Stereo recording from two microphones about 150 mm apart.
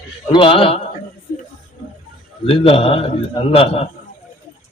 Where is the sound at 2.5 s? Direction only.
40° left (ahead or behind).